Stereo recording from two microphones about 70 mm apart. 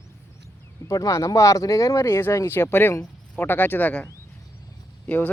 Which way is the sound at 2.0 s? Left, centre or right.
Left.